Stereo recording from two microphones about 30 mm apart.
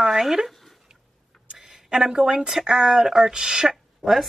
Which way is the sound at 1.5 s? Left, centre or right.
Centre.